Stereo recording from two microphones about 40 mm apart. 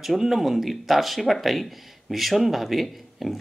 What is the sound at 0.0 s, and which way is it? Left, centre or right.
Speech, centre.